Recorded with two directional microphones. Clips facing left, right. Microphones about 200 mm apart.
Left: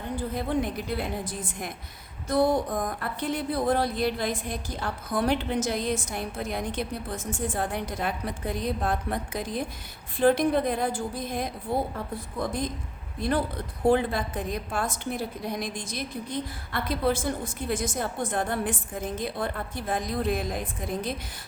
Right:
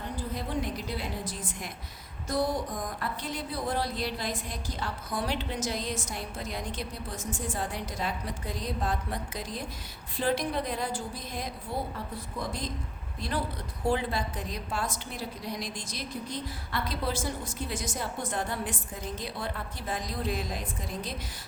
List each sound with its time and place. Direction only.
0.3 s a woman's voice: 55° left (ahead or behind)
13.1 s a woman's voice: 55° left (ahead or behind)